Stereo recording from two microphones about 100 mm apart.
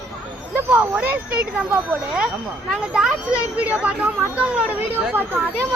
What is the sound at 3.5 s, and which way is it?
Speech, 15° right (ahead or behind).